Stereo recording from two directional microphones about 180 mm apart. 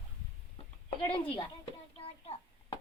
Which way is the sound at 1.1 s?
30° left (ahead or behind).